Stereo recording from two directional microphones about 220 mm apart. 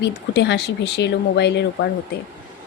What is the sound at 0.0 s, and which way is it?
Speech, 50° left (ahead or behind).